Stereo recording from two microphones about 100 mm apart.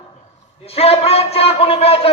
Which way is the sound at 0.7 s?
80° left.